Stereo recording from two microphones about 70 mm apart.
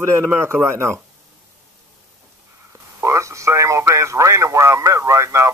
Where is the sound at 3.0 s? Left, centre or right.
Right.